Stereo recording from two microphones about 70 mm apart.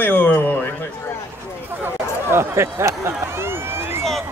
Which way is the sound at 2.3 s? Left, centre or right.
Right.